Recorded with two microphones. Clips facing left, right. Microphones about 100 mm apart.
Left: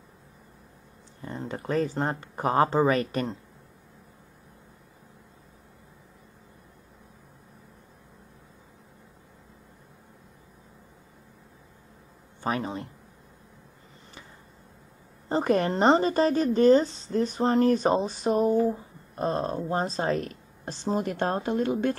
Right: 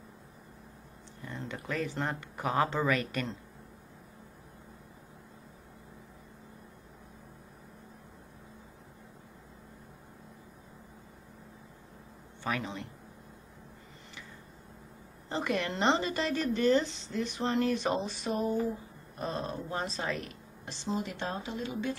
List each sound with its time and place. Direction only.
1.2 s speech: 35° left (ahead or behind)
12.4 s speech: 35° left (ahead or behind)
15.2 s speech: 40° left (ahead or behind)